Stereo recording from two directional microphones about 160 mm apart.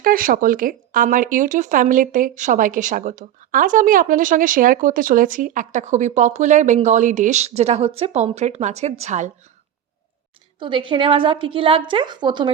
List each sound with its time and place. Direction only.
0.0 s speech: 60° right (ahead or behind)
10.6 s a woman's voice: 30° right (ahead or behind)